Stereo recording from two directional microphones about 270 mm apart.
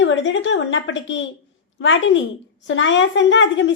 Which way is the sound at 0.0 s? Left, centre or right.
Left.